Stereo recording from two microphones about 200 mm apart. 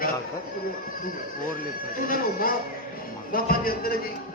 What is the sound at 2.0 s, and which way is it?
Speech, 45° left (ahead or behind).